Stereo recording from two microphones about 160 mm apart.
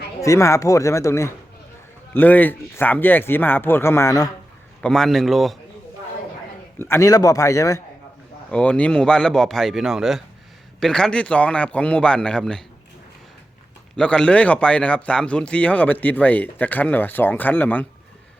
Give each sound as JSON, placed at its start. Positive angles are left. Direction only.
{"t": 0.2, "sound": "speech", "side_deg": 20}
{"t": 4.8, "sound": "speech", "side_deg": 5}
{"t": 6.7, "sound": "speech", "side_deg": 15}
{"t": 8.4, "sound": "speech", "side_deg": 5}
{"t": 13.9, "sound": "speech", "side_deg": 5}